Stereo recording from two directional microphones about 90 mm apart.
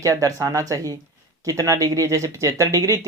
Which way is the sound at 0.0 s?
35° right (ahead or behind).